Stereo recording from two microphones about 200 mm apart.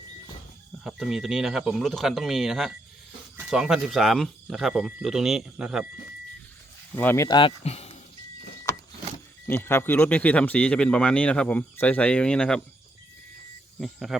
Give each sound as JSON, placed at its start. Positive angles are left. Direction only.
{"t": 0.9, "sound": "speech", "side_deg": 0}
{"t": 6.9, "sound": "speech", "side_deg": 10}
{"t": 7.3, "sound": "speech", "side_deg": 25}
{"t": 9.5, "sound": "speech", "side_deg": 10}
{"t": 13.7, "sound": "speech", "side_deg": 0}